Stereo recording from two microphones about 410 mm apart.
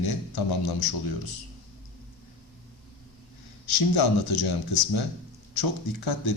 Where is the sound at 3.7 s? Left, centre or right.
Left.